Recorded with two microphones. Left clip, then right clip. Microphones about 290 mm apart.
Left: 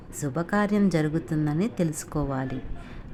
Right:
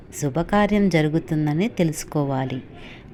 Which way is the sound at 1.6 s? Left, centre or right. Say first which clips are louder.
Right 5 dB; left.